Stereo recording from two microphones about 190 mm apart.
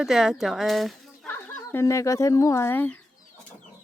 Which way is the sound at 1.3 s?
10° left (ahead or behind).